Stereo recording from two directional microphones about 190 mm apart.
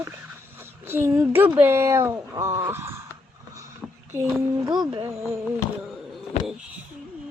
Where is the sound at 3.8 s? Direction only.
Centre (ahead or behind).